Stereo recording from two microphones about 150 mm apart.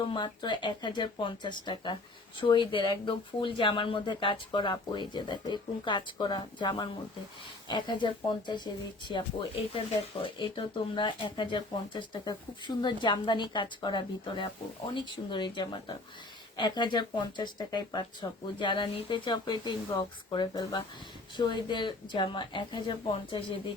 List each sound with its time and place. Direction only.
0.1 s speech: 30° left (ahead or behind)